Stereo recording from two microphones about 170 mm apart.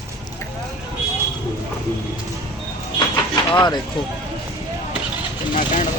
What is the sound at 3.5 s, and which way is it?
Speech, 25° left (ahead or behind).